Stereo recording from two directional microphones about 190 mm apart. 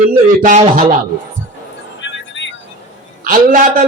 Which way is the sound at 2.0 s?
75° left (ahead or behind).